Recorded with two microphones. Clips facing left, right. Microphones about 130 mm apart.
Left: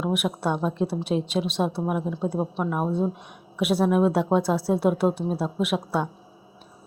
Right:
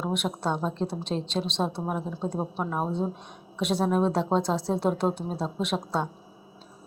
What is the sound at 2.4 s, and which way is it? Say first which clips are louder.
A woman's voice: left 2 dB; 5° right (ahead or behind).